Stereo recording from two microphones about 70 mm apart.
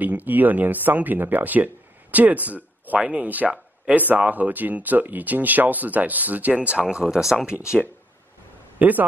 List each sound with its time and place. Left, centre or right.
0.0 s speech: right; by 7.5 s centre
8.7 s speech: right